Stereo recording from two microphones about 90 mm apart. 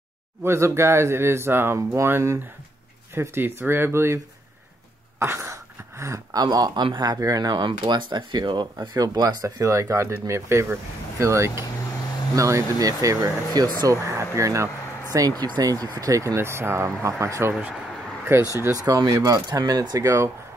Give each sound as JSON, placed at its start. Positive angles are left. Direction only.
{"t": 0.4, "sound": "speech", "side_deg": -30}
{"t": 5.2, "sound": "speech", "side_deg": -30}
{"t": 6.4, "sound": "speech", "side_deg": -50}
{"t": 9.6, "sound": "speech", "side_deg": -35}
{"t": 13.5, "sound": "speech", "side_deg": -45}
{"t": 14.0, "sound": "speech", "side_deg": -35}
{"t": 15.1, "sound": "speech", "side_deg": -45}